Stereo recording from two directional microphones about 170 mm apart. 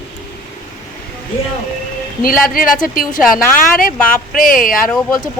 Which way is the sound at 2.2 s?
55° left (ahead or behind).